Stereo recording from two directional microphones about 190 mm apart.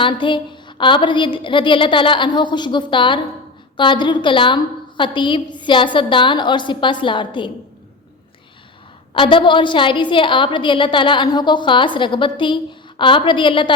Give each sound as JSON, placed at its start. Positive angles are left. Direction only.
{"t": 0.0, "sound": "a woman's voice", "side_deg": 25}
{"t": 9.1, "sound": "a woman's voice", "side_deg": 25}